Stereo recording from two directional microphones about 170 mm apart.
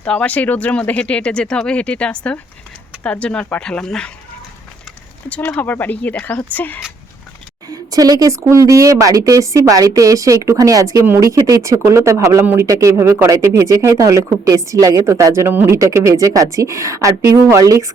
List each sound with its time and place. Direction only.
0.0 s speech: 10° left (ahead or behind)
5.3 s speech: 10° left (ahead or behind)
7.7 s speech: 20° right (ahead or behind)